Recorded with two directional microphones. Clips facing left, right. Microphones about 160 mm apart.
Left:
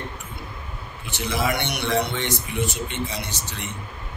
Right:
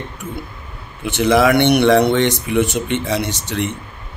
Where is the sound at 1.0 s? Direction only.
75° right (ahead or behind).